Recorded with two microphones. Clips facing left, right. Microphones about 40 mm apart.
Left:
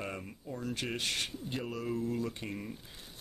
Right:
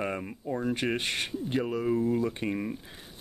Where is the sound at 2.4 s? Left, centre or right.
Right.